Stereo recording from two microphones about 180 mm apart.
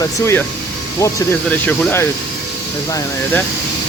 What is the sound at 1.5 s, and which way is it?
Speech, 10° left (ahead or behind).